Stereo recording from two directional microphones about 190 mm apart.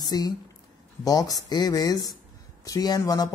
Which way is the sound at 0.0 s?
20° left (ahead or behind).